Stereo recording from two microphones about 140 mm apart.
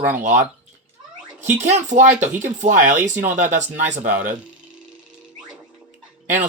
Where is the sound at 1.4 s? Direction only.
60° right (ahead or behind).